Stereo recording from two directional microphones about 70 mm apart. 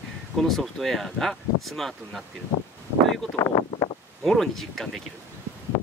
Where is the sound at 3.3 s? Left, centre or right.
Left.